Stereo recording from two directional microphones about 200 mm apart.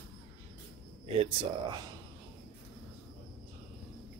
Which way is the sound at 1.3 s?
25° right (ahead or behind).